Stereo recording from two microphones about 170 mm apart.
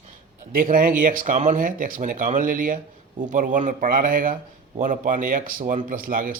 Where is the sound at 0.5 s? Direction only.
55° right (ahead or behind).